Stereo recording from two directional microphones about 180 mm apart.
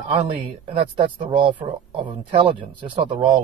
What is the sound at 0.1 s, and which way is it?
Speech, 30° right (ahead or behind).